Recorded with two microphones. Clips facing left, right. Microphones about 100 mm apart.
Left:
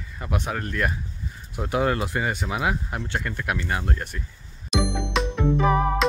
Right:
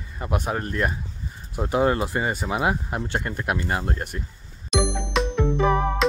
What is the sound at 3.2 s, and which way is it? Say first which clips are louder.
Speech: right 1 dB; 25° right (ahead or behind).